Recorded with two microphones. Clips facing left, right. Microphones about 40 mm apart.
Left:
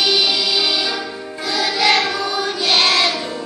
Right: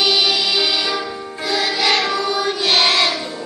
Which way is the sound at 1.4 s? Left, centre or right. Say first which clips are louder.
Right 1 dB; right.